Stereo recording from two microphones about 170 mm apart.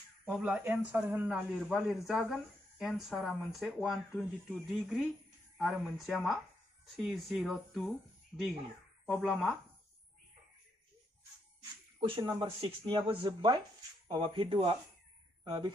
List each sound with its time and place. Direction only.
0.2 s a man's voice: 5° right (ahead or behind)
12.2 s speech: 25° right (ahead or behind)